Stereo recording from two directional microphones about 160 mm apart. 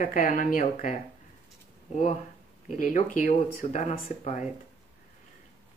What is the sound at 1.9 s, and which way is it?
Speech, 40° left (ahead or behind).